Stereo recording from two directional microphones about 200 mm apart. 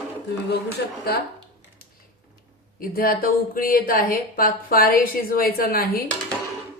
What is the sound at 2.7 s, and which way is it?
A woman's voice, 45° left (ahead or behind).